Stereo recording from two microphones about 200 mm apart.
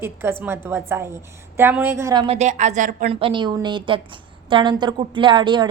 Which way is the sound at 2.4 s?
35° right (ahead or behind).